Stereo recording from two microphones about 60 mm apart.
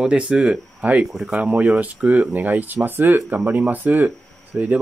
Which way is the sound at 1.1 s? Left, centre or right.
Centre.